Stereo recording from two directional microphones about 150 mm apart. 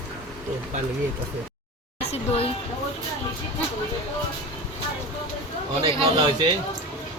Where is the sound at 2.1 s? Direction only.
40° left (ahead or behind).